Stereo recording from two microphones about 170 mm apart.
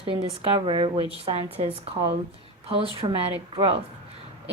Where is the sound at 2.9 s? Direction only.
30° right (ahead or behind).